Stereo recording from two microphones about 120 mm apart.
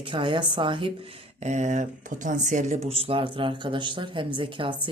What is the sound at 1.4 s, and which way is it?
Speech, 80° right.